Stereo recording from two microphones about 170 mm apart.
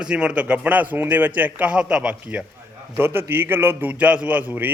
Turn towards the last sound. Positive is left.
turn(degrees=-10)  # may be behind; listen again after turning